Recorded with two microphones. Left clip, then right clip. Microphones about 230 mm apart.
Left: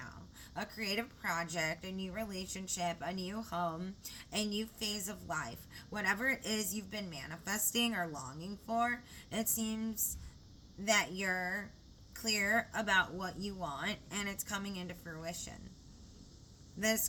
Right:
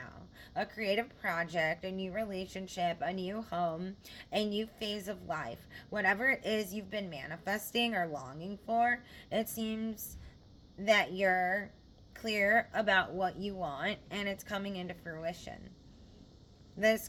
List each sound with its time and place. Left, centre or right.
0.5 s a woman's voice: centre
16.8 s a woman's voice: centre